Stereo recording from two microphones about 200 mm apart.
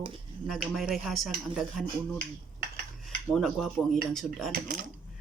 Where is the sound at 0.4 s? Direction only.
Centre (ahead or behind).